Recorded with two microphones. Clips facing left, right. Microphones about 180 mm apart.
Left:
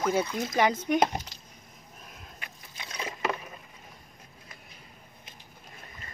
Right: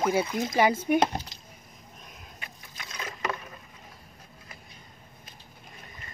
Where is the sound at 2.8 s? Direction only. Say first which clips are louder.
Left 2 dB; 30° left (ahead or behind).